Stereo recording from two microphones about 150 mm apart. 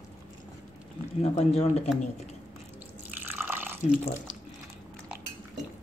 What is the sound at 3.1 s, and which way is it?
Water, 15° right (ahead or behind).